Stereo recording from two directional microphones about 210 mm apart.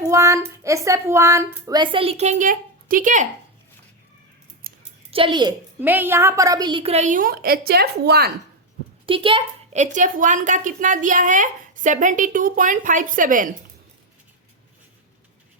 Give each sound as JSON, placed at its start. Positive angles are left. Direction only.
{"t": 0.0, "sound": "speech", "side_deg": -15}
{"t": 4.7, "sound": "scissors", "side_deg": -45}
{"t": 5.1, "sound": "a woman's voice", "side_deg": -25}
{"t": 5.8, "sound": "a woman's voice", "side_deg": -10}
{"t": 9.0, "sound": "speech", "side_deg": -25}